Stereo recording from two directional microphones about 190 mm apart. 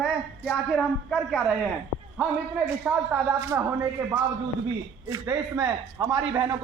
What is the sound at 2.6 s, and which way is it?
A man's voice, 5° right (ahead or behind).